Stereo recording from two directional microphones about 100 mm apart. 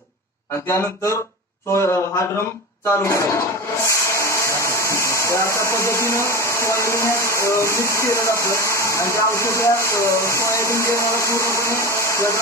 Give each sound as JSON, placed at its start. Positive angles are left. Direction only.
{"t": 0.7, "sound": "speech", "side_deg": 25}